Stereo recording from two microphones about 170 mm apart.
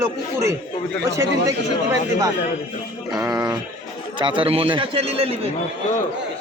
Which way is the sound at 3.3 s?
20° right (ahead or behind).